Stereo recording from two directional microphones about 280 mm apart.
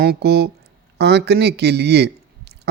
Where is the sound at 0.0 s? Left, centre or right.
Right.